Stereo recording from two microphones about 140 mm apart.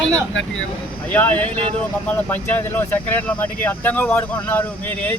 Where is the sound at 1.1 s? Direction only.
10° left (ahead or behind).